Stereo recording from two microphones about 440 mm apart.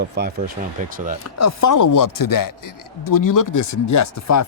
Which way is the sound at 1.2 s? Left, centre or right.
Left.